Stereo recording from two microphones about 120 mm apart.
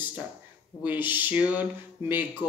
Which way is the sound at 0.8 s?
15° right (ahead or behind).